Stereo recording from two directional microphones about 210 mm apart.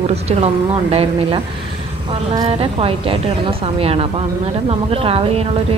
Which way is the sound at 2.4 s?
25° right (ahead or behind).